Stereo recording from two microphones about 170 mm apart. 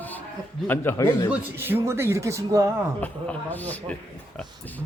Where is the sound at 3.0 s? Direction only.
10° left (ahead or behind).